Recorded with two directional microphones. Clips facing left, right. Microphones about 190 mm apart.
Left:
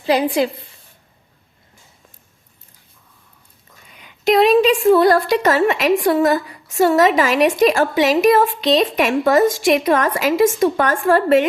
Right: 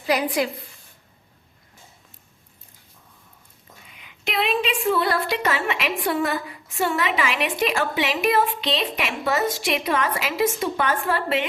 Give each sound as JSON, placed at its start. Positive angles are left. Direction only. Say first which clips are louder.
{"t": 0.0, "sound": "a woman's voice", "louder": "left 6 dB", "side_deg": 25}
{"t": 3.9, "sound": "a woman's voice", "louder": "left 12 dB", "side_deg": 40}